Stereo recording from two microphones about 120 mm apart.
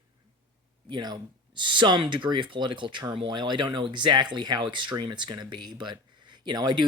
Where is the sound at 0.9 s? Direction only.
35° right (ahead or behind).